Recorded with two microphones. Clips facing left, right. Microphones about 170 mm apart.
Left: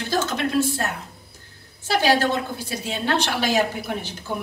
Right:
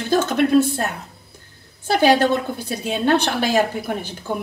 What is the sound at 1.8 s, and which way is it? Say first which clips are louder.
A woman's voice: right 4 dB; 55° right (ahead or behind).